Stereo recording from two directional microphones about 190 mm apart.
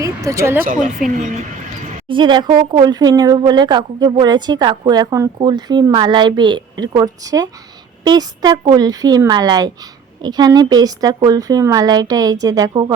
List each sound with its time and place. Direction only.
0.0 s speech: 15° right (ahead or behind)
0.9 s speech: 40° right (ahead or behind)
2.0 s speech: 25° right (ahead or behind)